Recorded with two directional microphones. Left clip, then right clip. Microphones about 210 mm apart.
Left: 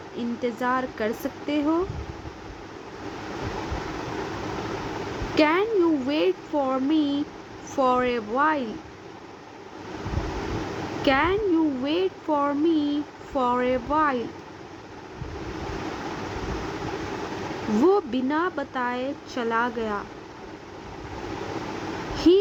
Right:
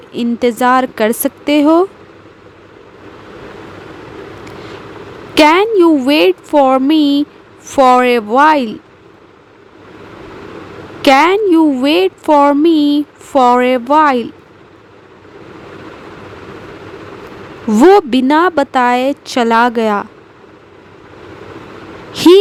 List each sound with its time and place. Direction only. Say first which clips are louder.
0.2 s speech: right 15 dB; 50° right (ahead or behind)
5.3 s speech: right 13 dB; 50° right (ahead or behind)
11.0 s speech: right 14 dB; 55° right (ahead or behind)
17.8 s speech: right 15 dB; 50° right (ahead or behind)